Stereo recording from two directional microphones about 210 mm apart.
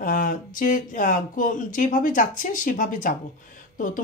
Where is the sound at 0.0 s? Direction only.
40° left (ahead or behind).